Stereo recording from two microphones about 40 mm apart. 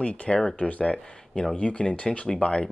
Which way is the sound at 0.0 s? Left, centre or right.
Left.